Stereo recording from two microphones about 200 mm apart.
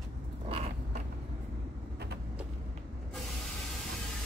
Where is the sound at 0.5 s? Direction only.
30° right (ahead or behind).